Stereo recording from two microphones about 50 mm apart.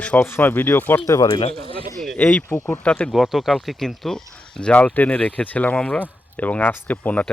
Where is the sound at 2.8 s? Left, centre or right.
Left.